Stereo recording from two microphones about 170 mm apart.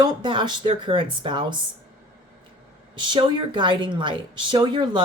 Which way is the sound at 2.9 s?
25° right (ahead or behind).